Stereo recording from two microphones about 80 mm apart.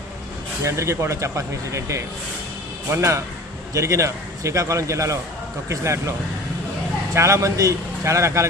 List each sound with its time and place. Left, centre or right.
0.6 s speech: right